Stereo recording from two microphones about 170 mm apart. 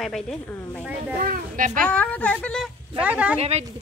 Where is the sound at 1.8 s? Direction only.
10° left (ahead or behind).